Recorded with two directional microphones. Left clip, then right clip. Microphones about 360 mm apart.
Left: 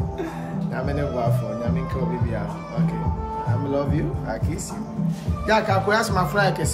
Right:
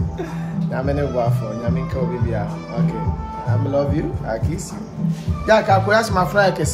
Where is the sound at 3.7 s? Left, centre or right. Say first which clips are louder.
Right 6 dB; centre.